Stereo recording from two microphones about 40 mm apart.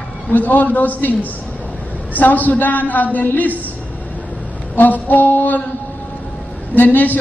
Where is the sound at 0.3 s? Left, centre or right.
Left.